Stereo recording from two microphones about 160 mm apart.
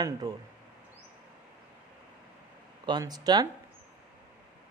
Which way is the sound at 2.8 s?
25° right (ahead or behind).